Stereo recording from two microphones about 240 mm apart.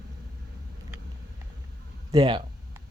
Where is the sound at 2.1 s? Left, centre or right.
Centre.